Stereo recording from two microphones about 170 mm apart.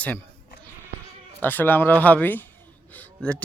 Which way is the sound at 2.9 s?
10° left (ahead or behind).